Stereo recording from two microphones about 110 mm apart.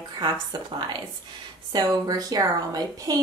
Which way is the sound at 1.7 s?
35° right (ahead or behind).